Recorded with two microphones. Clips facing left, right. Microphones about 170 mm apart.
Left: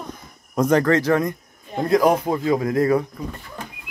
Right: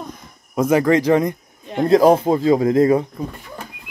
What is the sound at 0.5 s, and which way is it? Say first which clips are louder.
Speech: right 2 dB; 5° right (ahead or behind).